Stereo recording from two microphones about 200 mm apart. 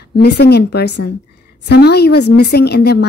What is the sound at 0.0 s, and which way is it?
A woman's voice, 55° left (ahead or behind).